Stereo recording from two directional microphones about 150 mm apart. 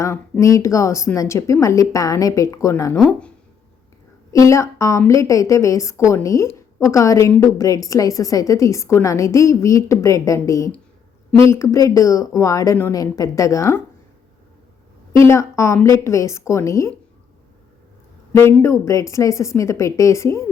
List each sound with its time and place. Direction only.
0.0 s a woman's voice: 20° left (ahead or behind)
3.1 s speech: 5° left (ahead or behind)
4.3 s a woman's voice: 20° left (ahead or behind)
15.2 s a woman's voice: 20° left (ahead or behind)
18.6 s a woman's voice: 20° left (ahead or behind)